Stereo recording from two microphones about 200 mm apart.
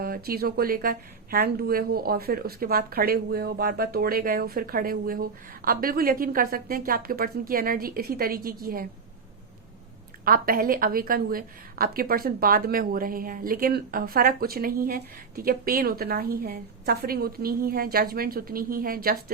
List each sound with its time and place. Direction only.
0.0 s speech: 50° right (ahead or behind)
10.2 s speech: 45° right (ahead or behind)